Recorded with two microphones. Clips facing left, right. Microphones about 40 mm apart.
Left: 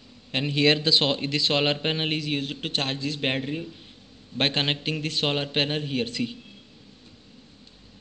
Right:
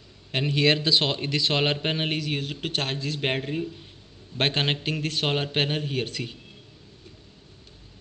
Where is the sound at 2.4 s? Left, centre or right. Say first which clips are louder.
Left 1 dB; left.